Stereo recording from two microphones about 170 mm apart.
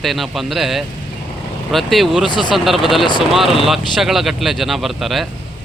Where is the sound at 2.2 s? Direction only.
25° left (ahead or behind).